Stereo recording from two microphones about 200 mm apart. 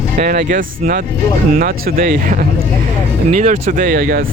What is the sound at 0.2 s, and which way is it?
Speech, 45° right (ahead or behind).